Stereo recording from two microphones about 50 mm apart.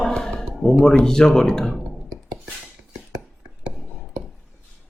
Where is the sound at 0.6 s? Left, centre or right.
Centre.